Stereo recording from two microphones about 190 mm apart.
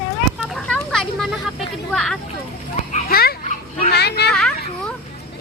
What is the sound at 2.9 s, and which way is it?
Children playing, 55° left (ahead or behind).